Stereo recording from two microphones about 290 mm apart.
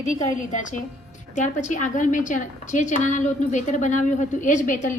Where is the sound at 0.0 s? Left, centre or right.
Left.